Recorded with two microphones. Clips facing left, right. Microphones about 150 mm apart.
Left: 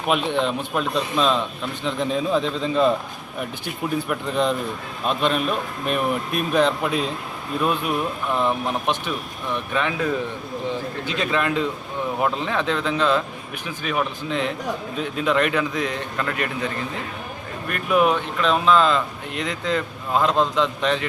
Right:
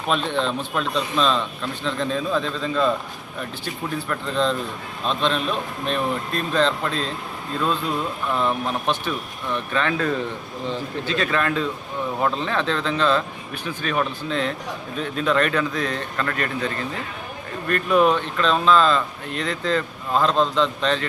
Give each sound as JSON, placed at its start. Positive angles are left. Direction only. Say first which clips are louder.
{"t": 0.1, "sound": "speech", "louder": "left 1 dB", "side_deg": 15}
{"t": 4.1, "sound": "speech", "louder": "right 1 dB", "side_deg": 15}